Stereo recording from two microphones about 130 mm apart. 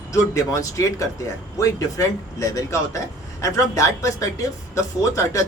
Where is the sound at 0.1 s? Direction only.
25° left (ahead or behind).